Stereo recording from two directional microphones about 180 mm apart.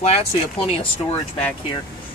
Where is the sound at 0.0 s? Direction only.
35° left (ahead or behind).